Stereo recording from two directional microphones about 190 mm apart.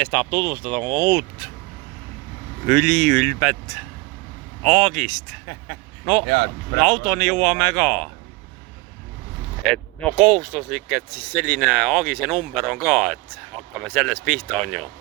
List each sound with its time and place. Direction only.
0.0 s speech: 5° left (ahead or behind)
2.6 s speech: 5° left (ahead or behind)
6.2 s speech: 70° right (ahead or behind)
6.7 s speech: 5° left (ahead or behind)
9.7 s speech: 5° left (ahead or behind)
10.2 s speech: 5° right (ahead or behind)